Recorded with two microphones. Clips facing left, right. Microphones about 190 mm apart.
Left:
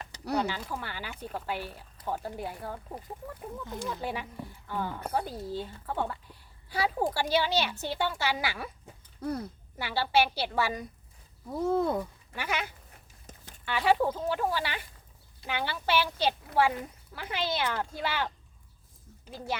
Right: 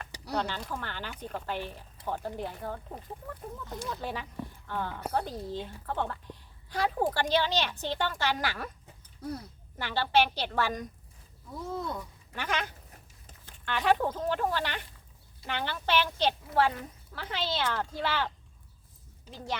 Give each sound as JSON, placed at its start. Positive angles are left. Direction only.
{"t": 0.3, "sound": "speech", "side_deg": 10}
{"t": 3.8, "sound": "a woman's voice", "side_deg": 10}
{"t": 9.7, "sound": "speech", "side_deg": 10}
{"t": 11.4, "sound": "speech", "side_deg": 50}
{"t": 12.3, "sound": "speech", "side_deg": 10}